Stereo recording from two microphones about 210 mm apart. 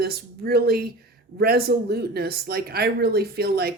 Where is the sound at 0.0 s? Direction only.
50° right (ahead or behind).